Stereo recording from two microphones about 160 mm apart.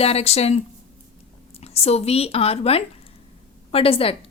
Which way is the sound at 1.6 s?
40° left (ahead or behind).